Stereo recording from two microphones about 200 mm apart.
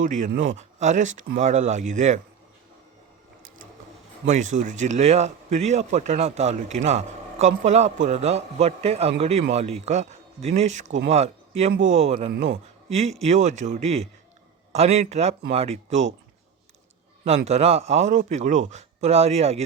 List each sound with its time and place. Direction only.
0.0 s speech: 40° right (ahead or behind)
4.5 s speech: 35° right (ahead or behind)
17.2 s speech: 30° right (ahead or behind)